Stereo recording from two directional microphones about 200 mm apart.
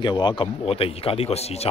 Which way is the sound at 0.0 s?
25° left (ahead or behind).